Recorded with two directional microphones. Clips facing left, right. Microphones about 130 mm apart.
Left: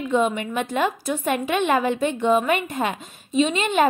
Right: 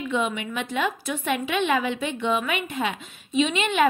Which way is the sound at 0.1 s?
40° left (ahead or behind).